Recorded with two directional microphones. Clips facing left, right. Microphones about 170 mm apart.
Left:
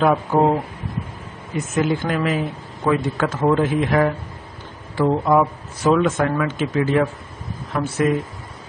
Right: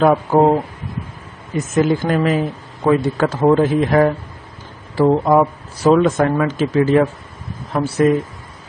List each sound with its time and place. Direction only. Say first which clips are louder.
0.0 s speech: right 4 dB; 40° right (ahead or behind)
1.8 s speech: right 5 dB; 40° right (ahead or behind)